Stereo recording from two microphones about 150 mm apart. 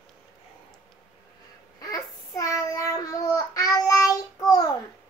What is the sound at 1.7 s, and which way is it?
Child singing, 20° left (ahead or behind).